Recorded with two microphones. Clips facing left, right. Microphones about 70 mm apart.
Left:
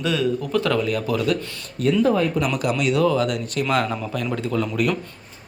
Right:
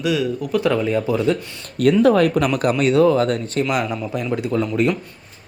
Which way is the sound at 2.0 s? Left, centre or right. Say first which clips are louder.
Right 5 dB; right.